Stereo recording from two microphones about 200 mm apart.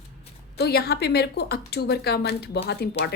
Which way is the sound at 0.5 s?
55° left (ahead or behind).